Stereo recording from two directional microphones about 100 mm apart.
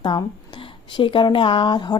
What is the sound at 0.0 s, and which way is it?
Speech, 55° left (ahead or behind).